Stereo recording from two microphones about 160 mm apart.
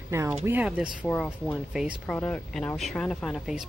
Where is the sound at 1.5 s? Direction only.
5° right (ahead or behind).